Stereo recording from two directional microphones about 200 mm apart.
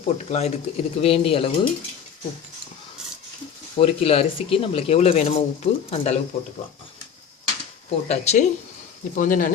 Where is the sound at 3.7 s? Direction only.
30° left (ahead or behind).